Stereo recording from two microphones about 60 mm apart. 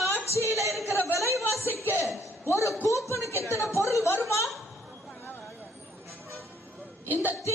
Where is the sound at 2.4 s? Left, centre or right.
Left.